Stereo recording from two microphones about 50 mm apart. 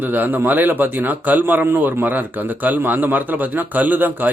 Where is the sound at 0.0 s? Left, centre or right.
Right.